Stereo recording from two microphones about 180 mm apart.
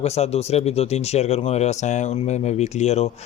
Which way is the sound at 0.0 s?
35° left (ahead or behind).